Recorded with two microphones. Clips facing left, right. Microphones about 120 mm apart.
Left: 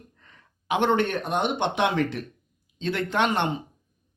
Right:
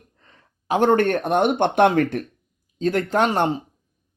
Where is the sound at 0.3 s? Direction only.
40° right (ahead or behind).